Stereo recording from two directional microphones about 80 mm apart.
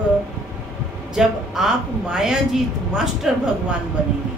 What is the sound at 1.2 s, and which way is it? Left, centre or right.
A woman's voice, centre.